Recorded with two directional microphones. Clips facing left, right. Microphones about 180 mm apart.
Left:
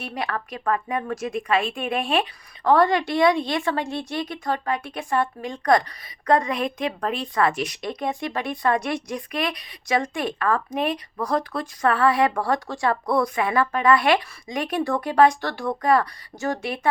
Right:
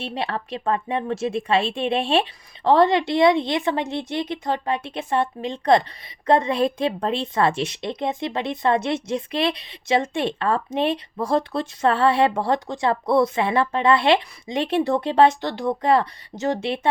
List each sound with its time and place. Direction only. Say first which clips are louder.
0.0 s speech: right 2 dB; 25° right (ahead or behind)